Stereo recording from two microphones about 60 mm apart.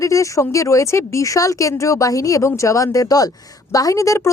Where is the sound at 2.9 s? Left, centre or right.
Left.